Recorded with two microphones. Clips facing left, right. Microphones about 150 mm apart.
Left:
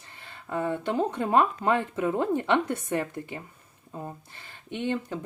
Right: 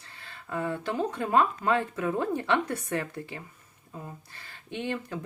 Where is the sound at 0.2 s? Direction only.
20° left (ahead or behind).